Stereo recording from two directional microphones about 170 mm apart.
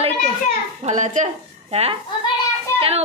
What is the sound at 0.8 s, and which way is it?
A woman's voice, 45° right (ahead or behind).